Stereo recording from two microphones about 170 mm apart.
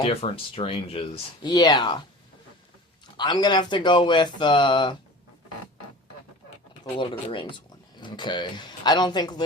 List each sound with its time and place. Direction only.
0.0 s speech: 35° left (ahead or behind)
3.2 s speech: 25° left (ahead or behind)
6.9 s speech: 30° left (ahead or behind)